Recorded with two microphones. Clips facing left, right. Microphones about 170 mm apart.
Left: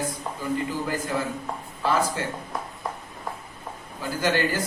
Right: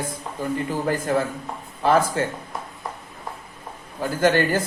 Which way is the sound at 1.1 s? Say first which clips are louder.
Right 5 dB; 55° right (ahead or behind).